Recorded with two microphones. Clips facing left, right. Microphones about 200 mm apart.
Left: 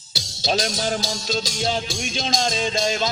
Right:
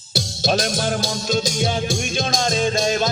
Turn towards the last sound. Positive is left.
turn(degrees=-50)  # may be behind; listen again after turning